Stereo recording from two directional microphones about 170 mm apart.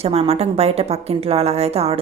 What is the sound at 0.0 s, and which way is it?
A woman's voice, 35° right (ahead or behind).